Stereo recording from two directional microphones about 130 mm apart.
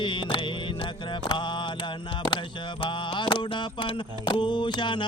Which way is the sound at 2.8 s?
40° left (ahead or behind).